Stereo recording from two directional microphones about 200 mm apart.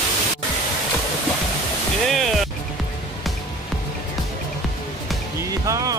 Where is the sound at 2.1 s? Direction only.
Centre (ahead or behind).